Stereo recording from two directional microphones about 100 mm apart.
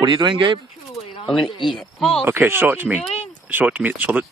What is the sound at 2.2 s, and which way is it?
Speech, 20° right (ahead or behind).